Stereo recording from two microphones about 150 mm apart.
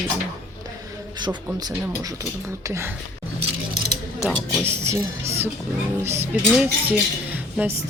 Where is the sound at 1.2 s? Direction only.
30° right (ahead or behind).